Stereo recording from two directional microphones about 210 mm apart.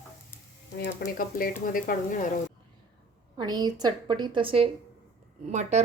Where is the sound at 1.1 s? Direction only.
45° left (ahead or behind).